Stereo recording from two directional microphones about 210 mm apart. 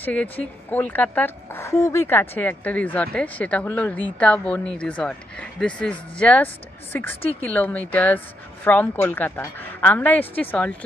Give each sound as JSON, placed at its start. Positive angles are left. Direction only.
{"t": 0.0, "sound": "speech", "side_deg": 5}